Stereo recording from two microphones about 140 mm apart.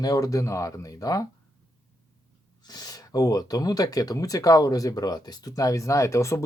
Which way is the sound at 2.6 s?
30° left (ahead or behind).